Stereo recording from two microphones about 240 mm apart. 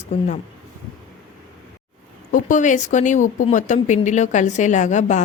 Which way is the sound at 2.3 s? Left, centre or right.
Left.